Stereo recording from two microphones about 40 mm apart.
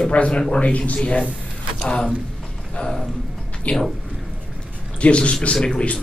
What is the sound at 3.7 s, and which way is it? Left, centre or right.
Speech, left.